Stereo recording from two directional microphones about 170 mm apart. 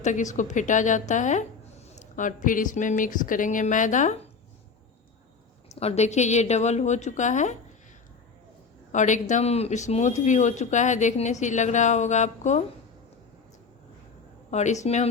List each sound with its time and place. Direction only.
0.0 s speech: 45° left (ahead or behind)
5.6 s speech: 40° left (ahead or behind)
8.9 s speech: 45° left (ahead or behind)
14.5 s speech: 45° left (ahead or behind)